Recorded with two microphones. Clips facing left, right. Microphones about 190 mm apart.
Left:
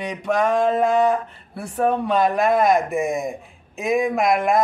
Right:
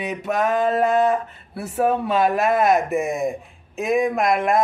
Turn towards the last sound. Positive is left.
turn(degrees=0)  # may be behind; listen again after turning